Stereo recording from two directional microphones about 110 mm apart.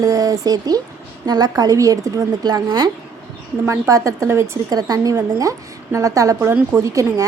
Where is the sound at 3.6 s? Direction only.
25° right (ahead or behind).